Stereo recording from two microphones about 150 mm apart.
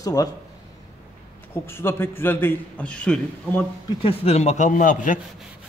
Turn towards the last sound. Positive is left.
turn(degrees=60)  # may be behind; listen again after turning